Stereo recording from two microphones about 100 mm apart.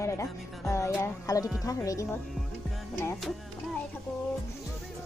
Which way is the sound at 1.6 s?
35° left (ahead or behind).